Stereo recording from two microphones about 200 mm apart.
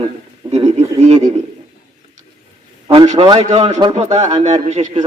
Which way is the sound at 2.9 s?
25° right (ahead or behind).